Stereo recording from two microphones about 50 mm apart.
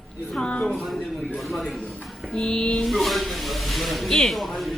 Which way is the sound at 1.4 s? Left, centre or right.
Centre.